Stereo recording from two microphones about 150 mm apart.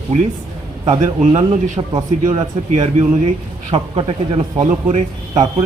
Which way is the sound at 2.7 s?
45° right (ahead or behind).